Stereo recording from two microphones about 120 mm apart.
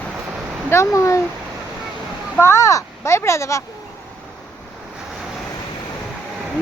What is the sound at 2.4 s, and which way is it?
Speech, 25° left (ahead or behind).